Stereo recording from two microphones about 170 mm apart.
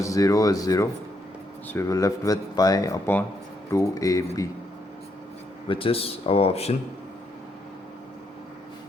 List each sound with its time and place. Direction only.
0.0 s speech: 20° left (ahead or behind)
5.6 s speech: 30° left (ahead or behind)